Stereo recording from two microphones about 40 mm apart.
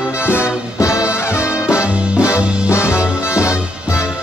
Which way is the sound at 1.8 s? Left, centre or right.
Right.